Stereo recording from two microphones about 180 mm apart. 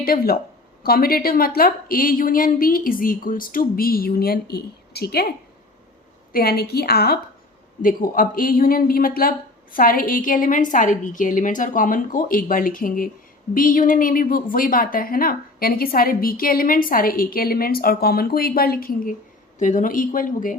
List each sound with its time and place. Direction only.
0.0 s a woman's voice: 55° left (ahead or behind)
6.3 s a woman's voice: 60° left (ahead or behind)
7.8 s a woman's voice: 50° left (ahead or behind)